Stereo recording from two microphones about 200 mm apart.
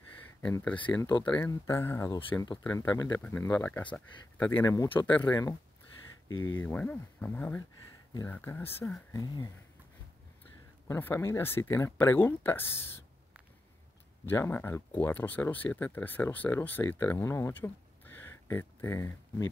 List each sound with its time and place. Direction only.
0.4 s speech: 5° left (ahead or behind)
0.9 s a sound: 20° left (ahead or behind)
1.2 s speech: 10° left (ahead or behind)
6.6 s speech: 10° left (ahead or behind)
9.1 s a sound: 20° left (ahead or behind)
10.9 s speech: 10° left (ahead or behind)
14.2 s speech: 10° left (ahead or behind)